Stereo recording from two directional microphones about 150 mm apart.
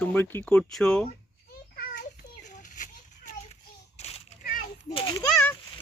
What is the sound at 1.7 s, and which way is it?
Children playing, 65° left (ahead or behind).